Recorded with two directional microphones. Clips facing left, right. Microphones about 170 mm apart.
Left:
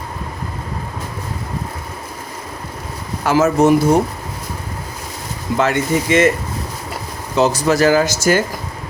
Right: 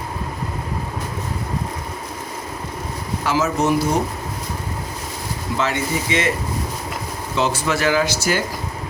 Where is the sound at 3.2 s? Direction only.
50° left (ahead or behind).